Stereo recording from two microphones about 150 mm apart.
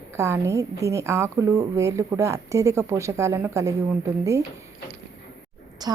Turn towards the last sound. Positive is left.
turn(degrees=-25)  # may be behind; listen again after turning